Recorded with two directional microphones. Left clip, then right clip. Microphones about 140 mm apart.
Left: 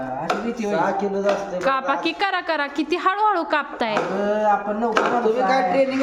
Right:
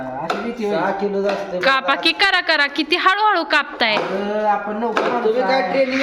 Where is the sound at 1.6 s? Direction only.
15° left (ahead or behind).